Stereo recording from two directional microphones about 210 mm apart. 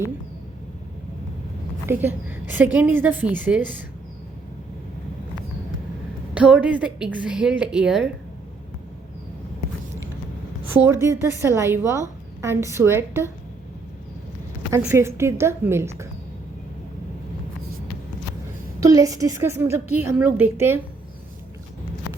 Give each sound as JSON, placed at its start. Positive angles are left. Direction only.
{"t": 1.9, "sound": "a woman's voice", "side_deg": -10}
{"t": 6.3, "sound": "a woman's voice", "side_deg": -5}
{"t": 10.8, "sound": "a woman's voice", "side_deg": -15}
{"t": 14.7, "sound": "a woman's voice", "side_deg": -10}
{"t": 18.8, "sound": "a woman's voice", "side_deg": -15}